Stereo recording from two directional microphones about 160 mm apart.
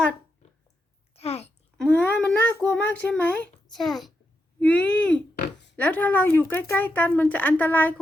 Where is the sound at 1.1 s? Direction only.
40° left (ahead or behind).